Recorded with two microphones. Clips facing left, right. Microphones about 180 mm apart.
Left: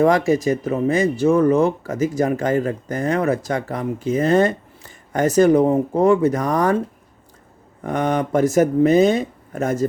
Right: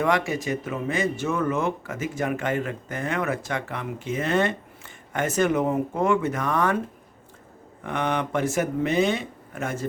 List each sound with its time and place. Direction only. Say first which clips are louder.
0.0 s speech: left 8 dB; 40° left (ahead or behind)
7.9 s speech: left 6 dB; 40° left (ahead or behind)